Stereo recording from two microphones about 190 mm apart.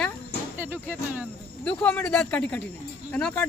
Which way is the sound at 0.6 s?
10° right (ahead or behind).